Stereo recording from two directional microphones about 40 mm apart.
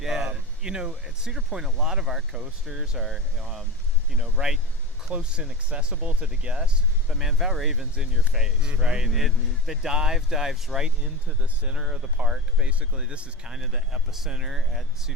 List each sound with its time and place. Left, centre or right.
0.0 s a sound: centre
0.6 s speech: centre
5.1 s speech: right
6.0 s speech: right
7.1 s speech: centre
7.9 s speech: right
9.0 s speech: centre
11.4 s speech: right
13.5 s speech: centre